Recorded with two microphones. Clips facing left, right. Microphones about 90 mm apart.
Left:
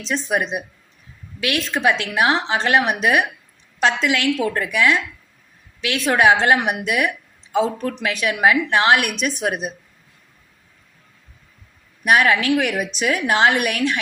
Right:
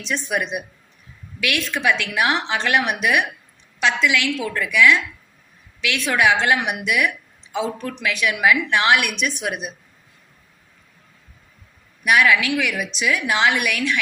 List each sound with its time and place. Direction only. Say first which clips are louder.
0.1 s a woman's voice: left 2 dB; 25° left (ahead or behind)
12.0 s a woman's voice: left 1 dB; 40° left (ahead or behind)